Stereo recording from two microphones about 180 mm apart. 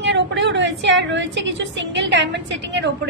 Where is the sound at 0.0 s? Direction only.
75° right (ahead or behind).